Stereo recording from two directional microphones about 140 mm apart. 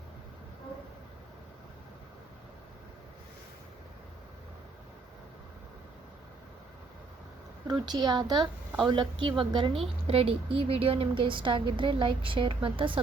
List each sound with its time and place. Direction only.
7.7 s a woman's voice: 30° right (ahead or behind)